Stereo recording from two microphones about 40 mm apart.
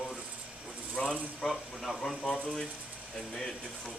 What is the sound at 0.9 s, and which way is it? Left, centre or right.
Speech, left.